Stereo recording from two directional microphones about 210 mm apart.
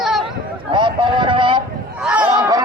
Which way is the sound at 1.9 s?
5° right (ahead or behind).